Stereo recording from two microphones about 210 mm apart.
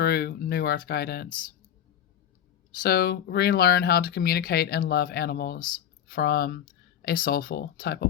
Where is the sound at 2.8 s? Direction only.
45° left (ahead or behind).